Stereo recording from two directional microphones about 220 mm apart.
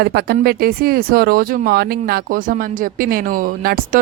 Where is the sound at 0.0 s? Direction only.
45° right (ahead or behind).